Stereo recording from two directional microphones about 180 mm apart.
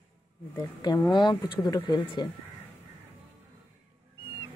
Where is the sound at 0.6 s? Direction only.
20° left (ahead or behind).